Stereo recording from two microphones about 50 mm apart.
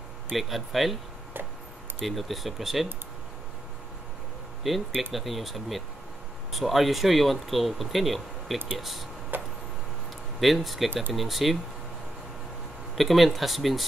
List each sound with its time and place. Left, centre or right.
0.4 s speech: centre
2.0 s speech: centre
4.6 s speech: centre
9.3 s a sound: right
10.4 s speech: centre
12.9 s speech: centre